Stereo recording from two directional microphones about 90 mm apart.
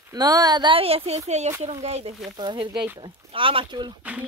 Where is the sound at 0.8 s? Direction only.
90° right.